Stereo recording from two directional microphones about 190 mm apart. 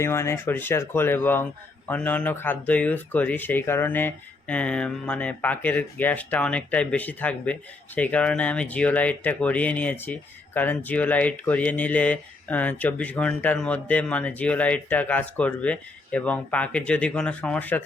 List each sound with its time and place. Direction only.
0.0 s speech: 15° left (ahead or behind)